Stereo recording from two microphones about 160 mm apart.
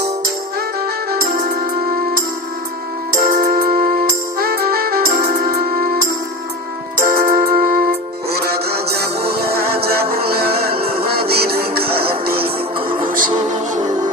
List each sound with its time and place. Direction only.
1.1 s music: 60° right (ahead or behind)
5.2 s music: 50° right (ahead or behind); by 12.5 s 70° right (ahead or behind)
13.1 s music: 60° right (ahead or behind)
13.5 s music: 50° right (ahead or behind)